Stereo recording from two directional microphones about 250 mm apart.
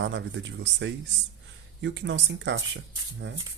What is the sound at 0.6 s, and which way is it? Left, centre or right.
Speech, right.